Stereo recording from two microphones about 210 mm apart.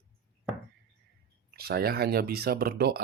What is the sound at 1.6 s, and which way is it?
Speech, 50° right (ahead or behind).